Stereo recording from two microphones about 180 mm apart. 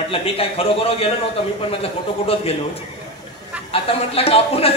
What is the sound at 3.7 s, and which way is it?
Speech, 30° left (ahead or behind).